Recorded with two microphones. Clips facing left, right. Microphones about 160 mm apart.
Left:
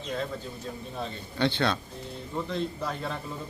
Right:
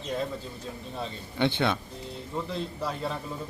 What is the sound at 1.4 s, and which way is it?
Speech, 20° right (ahead or behind).